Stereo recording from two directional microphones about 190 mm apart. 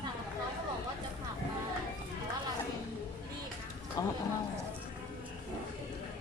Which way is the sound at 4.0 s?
15° left (ahead or behind).